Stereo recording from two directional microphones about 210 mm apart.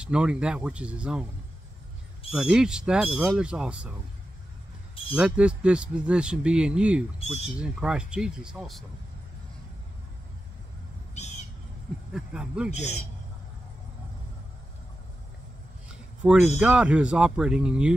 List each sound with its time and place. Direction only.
0.0 s speech: 5° right (ahead or behind)
2.3 s speech: 5° right (ahead or behind)
5.1 s speech: 5° right (ahead or behind)
11.1 s a sound: 30° left (ahead or behind)
12.1 s speech: 5° right (ahead or behind)
16.2 s speech: 5° right (ahead or behind)